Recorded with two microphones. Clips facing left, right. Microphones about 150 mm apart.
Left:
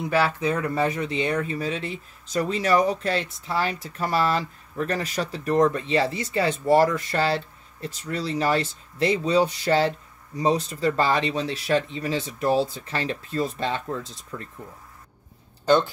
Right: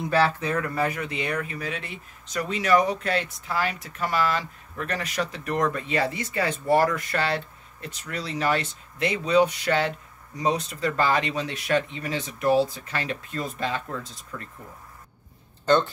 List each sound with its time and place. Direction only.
0.1 s speech: 15° left (ahead or behind)
15.6 s speech: 10° left (ahead or behind)